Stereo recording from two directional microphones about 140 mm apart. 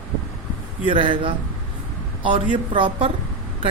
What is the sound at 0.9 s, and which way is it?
Speech, 40° right (ahead or behind).